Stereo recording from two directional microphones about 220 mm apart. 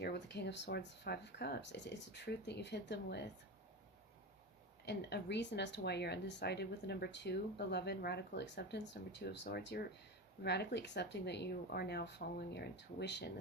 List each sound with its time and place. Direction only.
0.0 s speech: 50° left (ahead or behind)
4.9 s speech: 50° left (ahead or behind)